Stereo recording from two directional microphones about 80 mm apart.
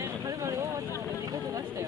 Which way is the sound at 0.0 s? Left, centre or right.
Right.